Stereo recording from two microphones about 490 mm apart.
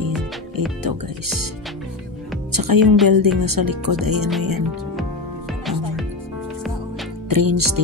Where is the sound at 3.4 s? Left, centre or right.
Right.